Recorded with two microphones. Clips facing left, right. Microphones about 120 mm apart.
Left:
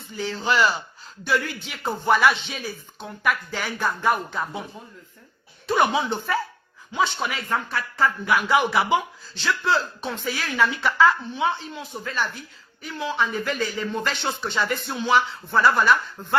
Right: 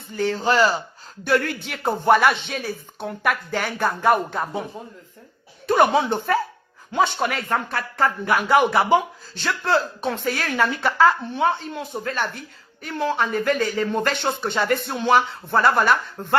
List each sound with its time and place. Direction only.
0.2 s speech: 50° right (ahead or behind)
1.2 s speech: 55° right (ahead or behind)
5.6 s speech: 50° right (ahead or behind)